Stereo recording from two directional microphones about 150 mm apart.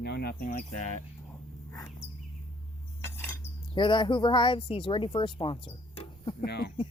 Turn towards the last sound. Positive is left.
turn(degrees=90)